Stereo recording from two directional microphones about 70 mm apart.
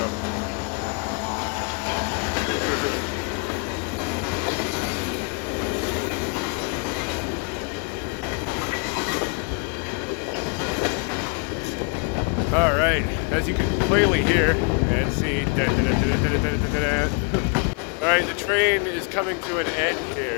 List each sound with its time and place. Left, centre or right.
12.5 s vehicle: left
13.9 s speech: centre
14.3 s speech: centre
14.9 s speech: centre
18.0 s speech: centre